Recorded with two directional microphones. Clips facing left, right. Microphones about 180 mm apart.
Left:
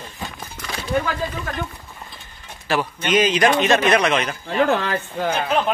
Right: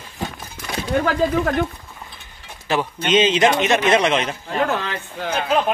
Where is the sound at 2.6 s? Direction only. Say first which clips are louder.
Right 1 dB; 20° right (ahead or behind).